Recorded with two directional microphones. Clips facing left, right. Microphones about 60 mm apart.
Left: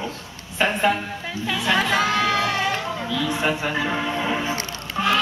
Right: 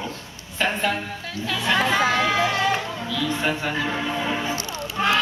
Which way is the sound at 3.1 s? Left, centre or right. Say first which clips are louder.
Left 1 dB; centre.